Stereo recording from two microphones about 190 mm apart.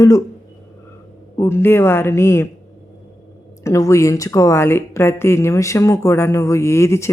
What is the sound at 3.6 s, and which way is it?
Speech, 15° left (ahead or behind).